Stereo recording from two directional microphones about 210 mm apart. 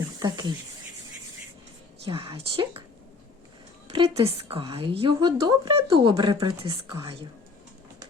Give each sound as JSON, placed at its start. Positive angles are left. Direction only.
{"t": 0.2, "sound": "speech", "side_deg": -20}
{"t": 2.0, "sound": "a woman's voice", "side_deg": -25}
{"t": 3.9, "sound": "a woman's voice", "side_deg": -25}